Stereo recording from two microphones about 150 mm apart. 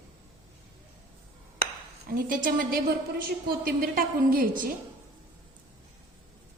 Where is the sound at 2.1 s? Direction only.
65° right (ahead or behind).